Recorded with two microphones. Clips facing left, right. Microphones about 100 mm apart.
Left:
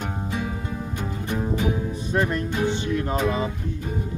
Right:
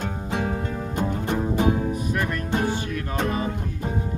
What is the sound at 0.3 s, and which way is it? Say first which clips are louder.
Music: right 4 dB; 60° right (ahead or behind).